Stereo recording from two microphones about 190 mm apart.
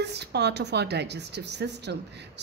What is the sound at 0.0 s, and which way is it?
A woman's voice, 60° right (ahead or behind).